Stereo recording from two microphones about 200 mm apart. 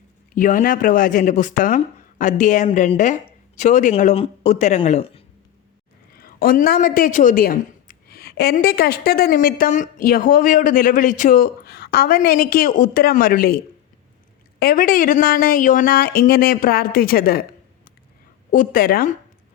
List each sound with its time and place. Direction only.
0.3 s speech: 40° left (ahead or behind)
6.1 s a woman's voice: 45° left (ahead or behind)
14.6 s a woman's voice: 50° left (ahead or behind)
18.5 s a woman's voice: 45° left (ahead or behind)